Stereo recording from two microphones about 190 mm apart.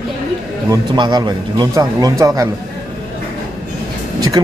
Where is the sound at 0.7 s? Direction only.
25° right (ahead or behind).